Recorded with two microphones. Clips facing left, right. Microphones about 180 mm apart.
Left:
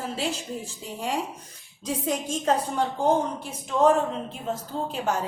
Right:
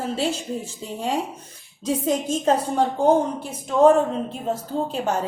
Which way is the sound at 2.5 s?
35° right (ahead or behind).